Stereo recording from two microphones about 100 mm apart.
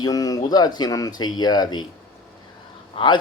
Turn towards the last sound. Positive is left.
turn(degrees=55)  # may be behind; listen again after turning